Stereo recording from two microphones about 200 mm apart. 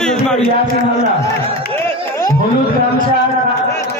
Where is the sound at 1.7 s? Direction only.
15° left (ahead or behind).